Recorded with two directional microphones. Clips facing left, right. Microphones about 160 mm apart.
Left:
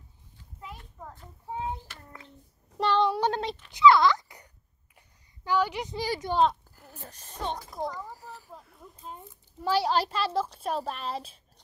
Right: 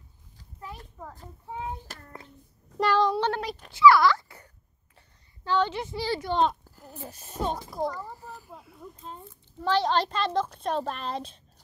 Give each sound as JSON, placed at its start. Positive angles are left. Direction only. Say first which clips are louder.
{"t": 1.9, "sound": "child singing", "louder": "right 4 dB", "side_deg": -40}
{"t": 2.8, "sound": "child singing", "louder": "right 1 dB", "side_deg": 0}
{"t": 3.1, "sound": "child singing", "louder": "right 1 dB", "side_deg": 15}
{"t": 3.7, "sound": "a sound", "louder": "right 1 dB", "side_deg": 20}
{"t": 5.4, "sound": "a woman's voice", "louder": "right 1 dB", "side_deg": 15}
{"t": 6.3, "sound": "a child's voice", "louder": "left 2 dB", "side_deg": 0}
{"t": 9.1, "sound": "a woman's voice", "louder": "right 1 dB", "side_deg": 10}